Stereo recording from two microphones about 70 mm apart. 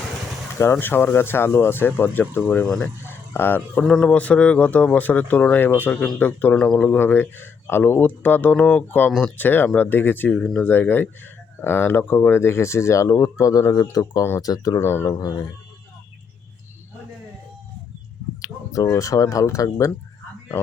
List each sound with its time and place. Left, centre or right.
0.6 s speech: left
2.6 s speech: centre
3.1 s speech: left
4.0 s speech: centre
6.6 s speech: centre
6.8 s speech: left
14.8 s speech: left
15.1 s speech: left
18.4 s speech: left